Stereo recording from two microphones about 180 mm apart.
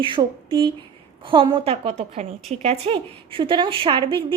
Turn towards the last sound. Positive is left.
turn(degrees=-30)  # may be behind; listen again after turning